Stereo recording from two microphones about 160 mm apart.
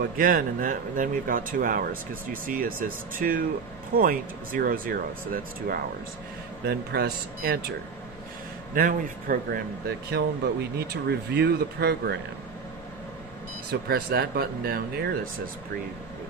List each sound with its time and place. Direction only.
0.0 s speech: 65° right (ahead or behind)
6.6 s speech: 80° right
8.7 s speech: 65° right (ahead or behind)
10.8 s speech: 85° right
13.7 s speech: 80° right